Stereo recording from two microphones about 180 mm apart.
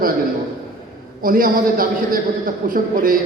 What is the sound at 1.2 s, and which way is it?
A man's voice, 50° right (ahead or behind).